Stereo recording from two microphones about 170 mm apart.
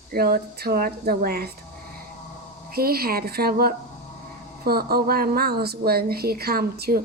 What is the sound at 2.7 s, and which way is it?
A woman's voice, 65° right (ahead or behind).